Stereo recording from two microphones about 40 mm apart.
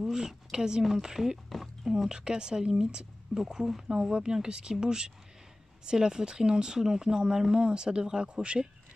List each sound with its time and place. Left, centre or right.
0.0 s a sound: centre
0.3 s a woman's voice: centre
2.1 s speech: centre